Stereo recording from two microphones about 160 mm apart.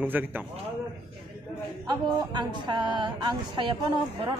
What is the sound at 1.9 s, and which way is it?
Speech, 25° right (ahead or behind).